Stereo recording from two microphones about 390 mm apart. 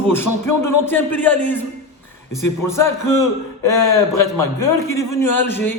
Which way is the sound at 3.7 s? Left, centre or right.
Left.